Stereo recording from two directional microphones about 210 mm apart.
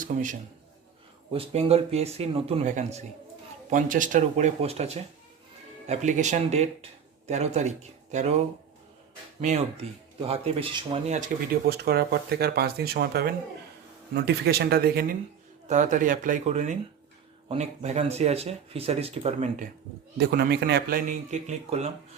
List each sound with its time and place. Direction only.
0.0 s a man's voice: 40° right (ahead or behind)
1.3 s speech: 25° right (ahead or behind)
10.2 s speech: 30° right (ahead or behind)
11.6 s speech: 50° right (ahead or behind)
15.6 s speech: 35° right (ahead or behind)
20.1 s speech: 50° right (ahead or behind); by 21.8 s 35° right (ahead or behind)